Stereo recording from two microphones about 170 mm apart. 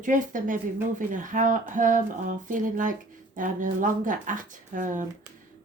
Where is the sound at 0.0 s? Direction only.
50° right (ahead or behind).